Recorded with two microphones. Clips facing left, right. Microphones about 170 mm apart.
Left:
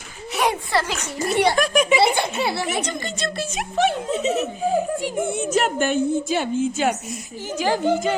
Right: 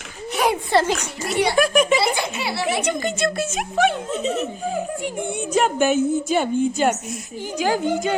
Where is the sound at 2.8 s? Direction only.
10° right (ahead or behind).